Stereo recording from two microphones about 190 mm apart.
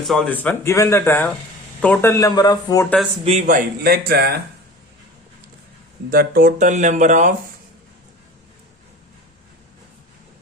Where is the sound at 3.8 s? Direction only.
55° right (ahead or behind).